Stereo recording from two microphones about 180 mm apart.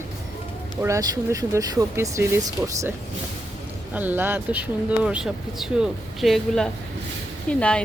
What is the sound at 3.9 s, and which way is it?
Speech, 10° right (ahead or behind).